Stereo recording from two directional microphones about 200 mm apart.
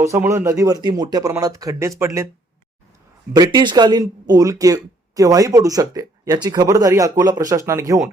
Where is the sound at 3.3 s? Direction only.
20° right (ahead or behind).